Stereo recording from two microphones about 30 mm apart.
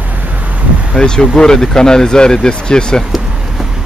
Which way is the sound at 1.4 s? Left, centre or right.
Centre.